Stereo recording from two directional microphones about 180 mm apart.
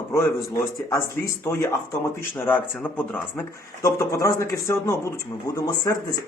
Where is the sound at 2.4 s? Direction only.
10° left (ahead or behind).